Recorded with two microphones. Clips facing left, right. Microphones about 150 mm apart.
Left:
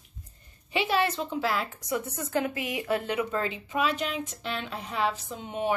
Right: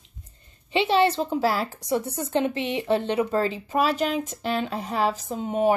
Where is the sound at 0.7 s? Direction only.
25° right (ahead or behind).